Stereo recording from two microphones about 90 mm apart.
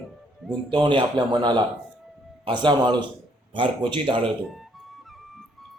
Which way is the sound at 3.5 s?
70° right (ahead or behind).